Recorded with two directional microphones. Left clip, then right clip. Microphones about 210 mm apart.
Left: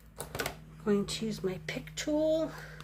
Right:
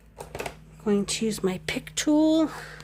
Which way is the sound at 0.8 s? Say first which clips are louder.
Right 6 dB; 30° right (ahead or behind).